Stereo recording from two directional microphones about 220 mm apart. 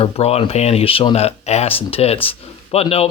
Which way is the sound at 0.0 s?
25° left (ahead or behind).